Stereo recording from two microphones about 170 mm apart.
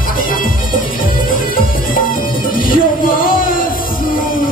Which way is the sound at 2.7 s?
55° left (ahead or behind).